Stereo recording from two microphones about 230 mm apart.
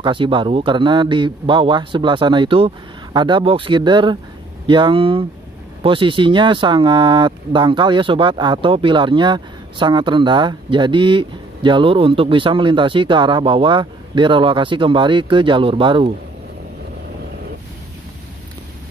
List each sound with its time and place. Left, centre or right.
0.0 s speech: right